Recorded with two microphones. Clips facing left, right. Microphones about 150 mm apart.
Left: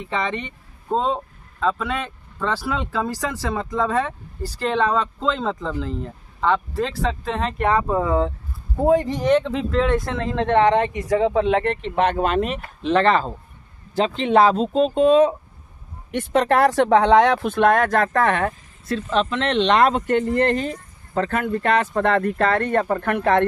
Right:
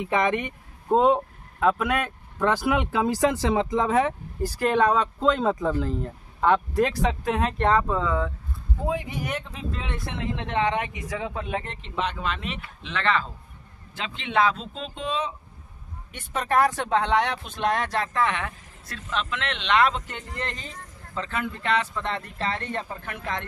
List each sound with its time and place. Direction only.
0.0 s speech: 10° right (ahead or behind)
7.4 s speech: 5° left (ahead or behind)
7.7 s speech: 20° left (ahead or behind)
9.4 s speech: 90° left
10.6 s speech: 40° left (ahead or behind)
11.1 s speech: 70° left (ahead or behind); by 15.3 s 50° left (ahead or behind)
16.3 s speech: 60° left (ahead or behind)
18.9 s speech: 30° left (ahead or behind); by 23.4 s 65° left (ahead or behind)